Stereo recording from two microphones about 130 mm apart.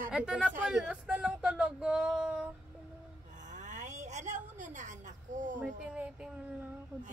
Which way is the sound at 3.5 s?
70° right (ahead or behind).